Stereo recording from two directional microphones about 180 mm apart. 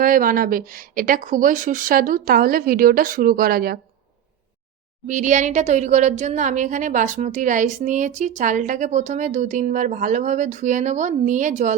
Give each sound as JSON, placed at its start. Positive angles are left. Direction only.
{"t": 0.0, "sound": "speech", "side_deg": -50}
{"t": 5.0, "sound": "speech", "side_deg": -45}